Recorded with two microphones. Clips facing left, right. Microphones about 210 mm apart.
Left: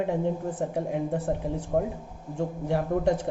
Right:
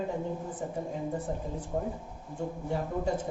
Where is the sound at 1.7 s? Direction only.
60° left (ahead or behind).